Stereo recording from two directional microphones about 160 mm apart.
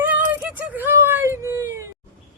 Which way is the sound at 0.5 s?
10° right (ahead or behind).